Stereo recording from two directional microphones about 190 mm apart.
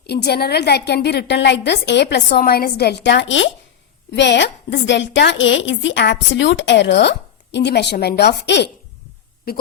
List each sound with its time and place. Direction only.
0.1 s a woman's voice: 60° left (ahead or behind)
2.4 s a woman's voice: 50° left (ahead or behind)